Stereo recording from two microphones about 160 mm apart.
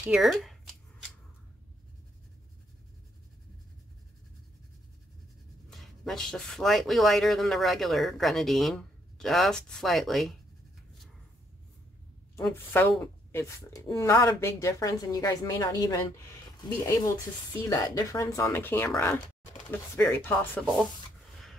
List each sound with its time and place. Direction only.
0.0 s speech: 5° right (ahead or behind)
5.7 s speech: centre (ahead or behind)
12.4 s speech: 10° left (ahead or behind)